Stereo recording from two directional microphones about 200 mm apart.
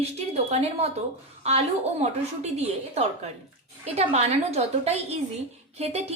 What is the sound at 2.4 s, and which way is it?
A woman's voice, 35° right (ahead or behind).